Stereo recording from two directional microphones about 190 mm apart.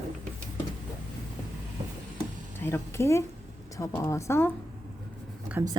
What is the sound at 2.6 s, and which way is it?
A woman's voice, 10° left (ahead or behind).